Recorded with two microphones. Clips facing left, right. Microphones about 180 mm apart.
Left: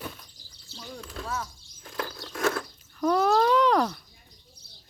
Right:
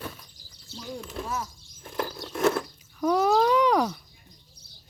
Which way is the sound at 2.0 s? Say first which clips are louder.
Right 4 dB; 25° right (ahead or behind).